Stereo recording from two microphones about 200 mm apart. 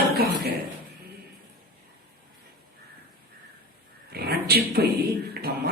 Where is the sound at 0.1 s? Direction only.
50° right (ahead or behind).